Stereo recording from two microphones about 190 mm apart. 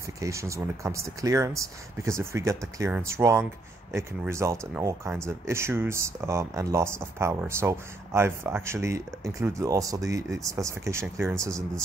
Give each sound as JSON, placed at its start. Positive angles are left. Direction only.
{"t": 0.0, "sound": "speech", "side_deg": -15}